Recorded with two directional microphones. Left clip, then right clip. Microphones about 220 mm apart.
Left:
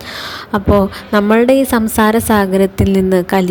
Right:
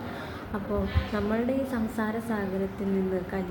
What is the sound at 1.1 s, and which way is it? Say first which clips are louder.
A woman's voice: left 19 dB; 50° left (ahead or behind).